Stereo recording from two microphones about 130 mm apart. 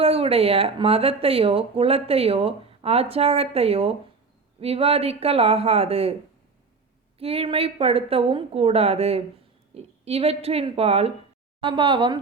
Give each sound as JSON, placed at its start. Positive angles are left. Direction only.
{"t": 0.0, "sound": "speech", "side_deg": -50}
{"t": 7.2, "sound": "speech", "side_deg": -50}
{"t": 11.6, "sound": "a woman's voice", "side_deg": -40}